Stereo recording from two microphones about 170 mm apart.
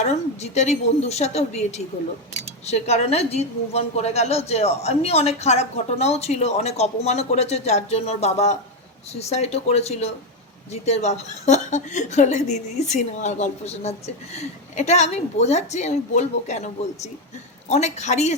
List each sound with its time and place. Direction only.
0.0 s a woman's voice: 40° left (ahead or behind)